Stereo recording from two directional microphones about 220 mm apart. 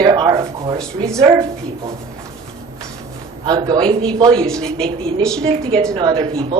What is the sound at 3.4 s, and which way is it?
Speech, 20° right (ahead or behind).